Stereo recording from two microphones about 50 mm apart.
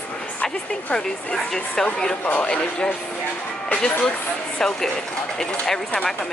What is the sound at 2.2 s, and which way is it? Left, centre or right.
Speech, left.